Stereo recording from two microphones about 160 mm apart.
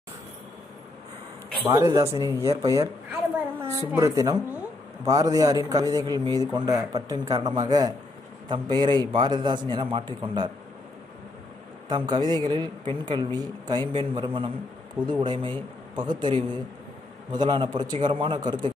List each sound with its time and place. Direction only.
1.6 s a woman's voice: 15° right (ahead or behind)
3.1 s a sound: 10° right (ahead or behind)
3.9 s a woman's voice: 20° right (ahead or behind)
11.9 s a woman's voice: 25° right (ahead or behind)